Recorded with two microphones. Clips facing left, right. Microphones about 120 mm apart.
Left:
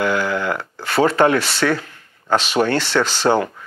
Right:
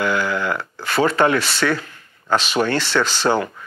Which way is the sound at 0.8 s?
40° left (ahead or behind).